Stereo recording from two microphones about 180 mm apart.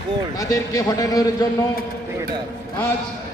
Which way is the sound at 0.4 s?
20° left (ahead or behind).